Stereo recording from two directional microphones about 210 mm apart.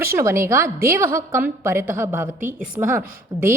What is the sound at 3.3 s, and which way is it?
Speech, 20° right (ahead or behind).